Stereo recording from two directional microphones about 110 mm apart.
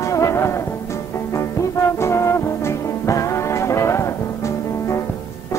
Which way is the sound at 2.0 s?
25° left (ahead or behind).